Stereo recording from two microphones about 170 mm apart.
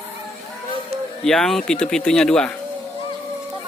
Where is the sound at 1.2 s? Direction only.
Centre (ahead or behind).